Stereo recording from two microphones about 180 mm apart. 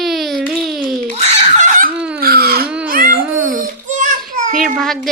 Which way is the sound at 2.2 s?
60° right (ahead or behind).